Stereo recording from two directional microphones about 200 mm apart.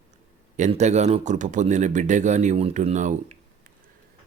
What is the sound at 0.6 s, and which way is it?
Speech, 35° right (ahead or behind).